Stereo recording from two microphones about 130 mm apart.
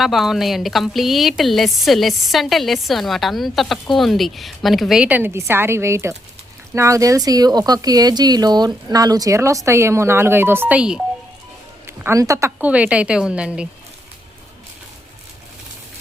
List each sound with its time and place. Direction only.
0.0 s a woman's voice: centre (ahead or behind)
11.9 s speech: 20° right (ahead or behind)
12.5 s a woman's voice: 10° right (ahead or behind)